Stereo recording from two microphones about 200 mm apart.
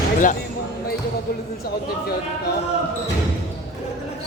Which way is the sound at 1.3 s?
50° left (ahead or behind).